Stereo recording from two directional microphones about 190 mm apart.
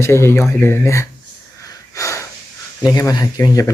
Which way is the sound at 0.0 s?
15° left (ahead or behind).